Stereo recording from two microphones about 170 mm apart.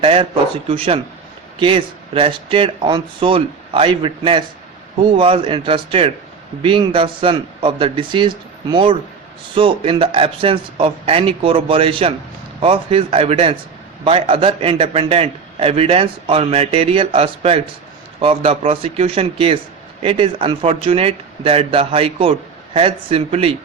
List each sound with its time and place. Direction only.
0.0 s a man's voice: 35° right (ahead or behind)
1.5 s a man's voice: 30° right (ahead or behind)